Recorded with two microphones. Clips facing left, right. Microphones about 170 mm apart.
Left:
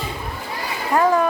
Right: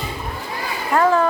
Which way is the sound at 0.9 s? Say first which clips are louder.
Right 1 dB; 20° left (ahead or behind).